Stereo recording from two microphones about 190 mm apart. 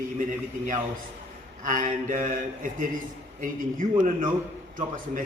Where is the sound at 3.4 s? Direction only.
45° right (ahead or behind).